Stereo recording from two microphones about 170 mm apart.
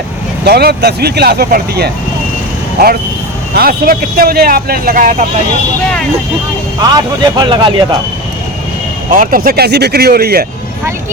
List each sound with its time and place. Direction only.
0.4 s speech: 70° right (ahead or behind)
3.5 s speech: 60° right (ahead or behind)
6.7 s speech: 25° right (ahead or behind)
9.0 s speech: 55° right (ahead or behind)